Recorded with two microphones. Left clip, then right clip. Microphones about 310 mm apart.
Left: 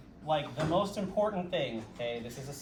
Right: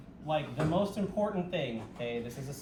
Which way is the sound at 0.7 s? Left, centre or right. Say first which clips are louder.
Left 3 dB; centre.